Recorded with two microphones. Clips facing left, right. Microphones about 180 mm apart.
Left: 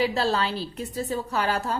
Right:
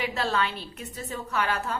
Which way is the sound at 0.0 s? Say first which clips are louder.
Left 4 dB; 35° left (ahead or behind).